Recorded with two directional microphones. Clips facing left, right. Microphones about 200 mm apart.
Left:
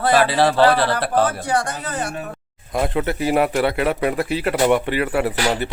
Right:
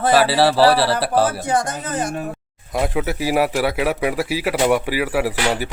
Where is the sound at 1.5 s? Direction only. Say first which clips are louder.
Right 1 dB; 20° right (ahead or behind).